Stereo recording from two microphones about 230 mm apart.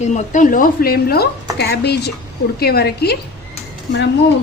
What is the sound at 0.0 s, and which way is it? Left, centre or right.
Speech, left.